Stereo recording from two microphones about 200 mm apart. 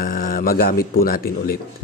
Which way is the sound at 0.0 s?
45° left (ahead or behind).